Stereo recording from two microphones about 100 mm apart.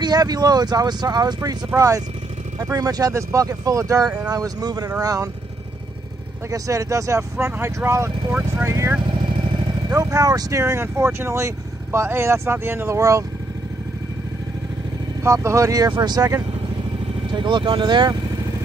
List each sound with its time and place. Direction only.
0.0 s speech: 40° right (ahead or behind)
6.5 s speech: 35° right (ahead or behind)
8.3 s speech: 10° right (ahead or behind)
8.6 s speech: 30° right (ahead or behind)
9.9 s speech: 35° right (ahead or behind)
15.2 s speech: 30° right (ahead or behind)
17.3 s speech: 50° right (ahead or behind)